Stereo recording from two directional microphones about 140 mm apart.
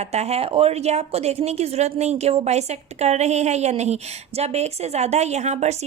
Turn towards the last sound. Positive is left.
turn(degrees=-50)  # may be behind; listen again after turning